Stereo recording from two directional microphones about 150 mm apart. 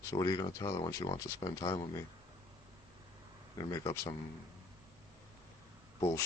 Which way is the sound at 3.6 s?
20° left (ahead or behind).